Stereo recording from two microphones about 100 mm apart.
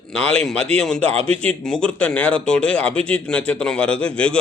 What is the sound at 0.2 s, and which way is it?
Speech, 10° left (ahead or behind).